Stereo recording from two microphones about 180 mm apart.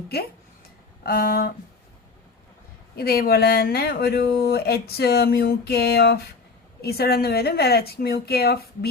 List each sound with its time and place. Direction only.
1.0 s speech: 55° left (ahead or behind)
2.9 s speech: 60° left (ahead or behind)